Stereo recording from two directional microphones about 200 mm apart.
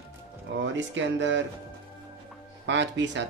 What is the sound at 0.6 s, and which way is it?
Speech, 65° right (ahead or behind).